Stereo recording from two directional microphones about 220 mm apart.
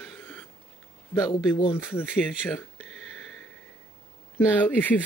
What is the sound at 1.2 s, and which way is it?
Speech, 15° left (ahead or behind).